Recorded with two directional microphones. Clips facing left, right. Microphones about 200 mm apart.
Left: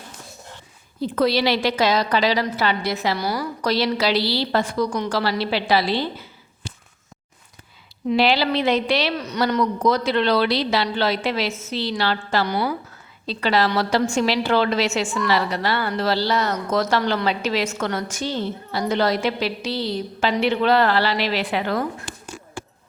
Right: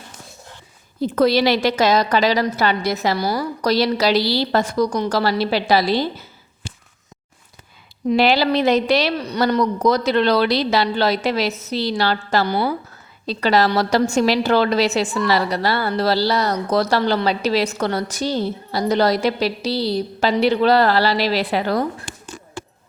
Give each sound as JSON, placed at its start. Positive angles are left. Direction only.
{"t": 1.0, "sound": "a woman's voice", "side_deg": -45}
{"t": 8.1, "sound": "a woman's voice", "side_deg": -45}